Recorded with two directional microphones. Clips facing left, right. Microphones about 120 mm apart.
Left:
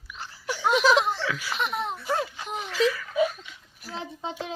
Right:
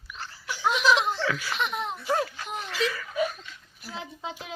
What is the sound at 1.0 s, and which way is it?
Laughter, 5° left (ahead or behind).